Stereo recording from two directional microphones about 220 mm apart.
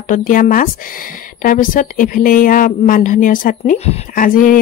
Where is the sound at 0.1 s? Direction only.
40° left (ahead or behind).